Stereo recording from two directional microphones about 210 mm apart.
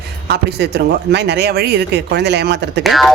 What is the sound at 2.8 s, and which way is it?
Speech, centre (ahead or behind).